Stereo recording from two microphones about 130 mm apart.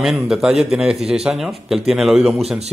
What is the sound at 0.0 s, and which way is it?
A man's voice, centre (ahead or behind).